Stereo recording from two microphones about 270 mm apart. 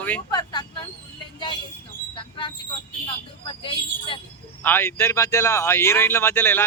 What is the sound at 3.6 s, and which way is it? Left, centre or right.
Speech, centre.